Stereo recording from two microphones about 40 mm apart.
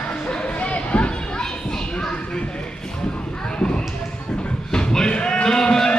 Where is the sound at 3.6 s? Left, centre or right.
Left.